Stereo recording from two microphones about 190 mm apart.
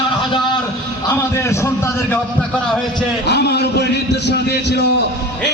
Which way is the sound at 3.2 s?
60° left (ahead or behind).